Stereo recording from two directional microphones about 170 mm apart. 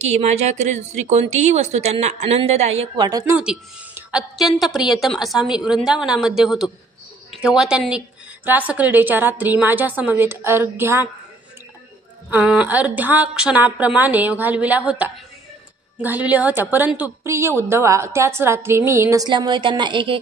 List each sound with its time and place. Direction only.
0.1 s a woman's voice: 40° right (ahead or behind)
3.0 s a woman's voice: 20° right (ahead or behind)
3.3 s a woman's voice: 5° right (ahead or behind)
12.3 s a woman's voice: 10° right (ahead or behind); by 20.2 s 30° right (ahead or behind)